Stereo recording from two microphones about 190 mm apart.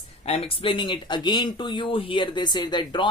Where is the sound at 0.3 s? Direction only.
30° left (ahead or behind).